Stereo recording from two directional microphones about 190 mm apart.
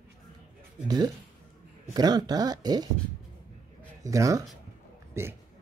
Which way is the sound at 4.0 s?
15° right (ahead or behind).